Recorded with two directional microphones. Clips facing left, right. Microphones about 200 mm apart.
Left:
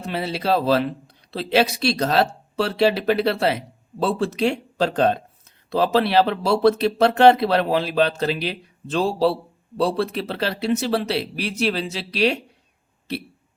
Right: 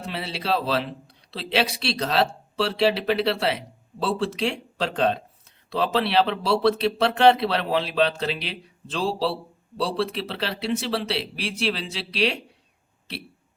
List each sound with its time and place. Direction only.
0.0 s speech: 45° left (ahead or behind)